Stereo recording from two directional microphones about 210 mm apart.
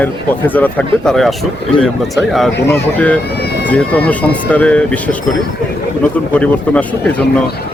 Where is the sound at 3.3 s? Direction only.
50° left (ahead or behind).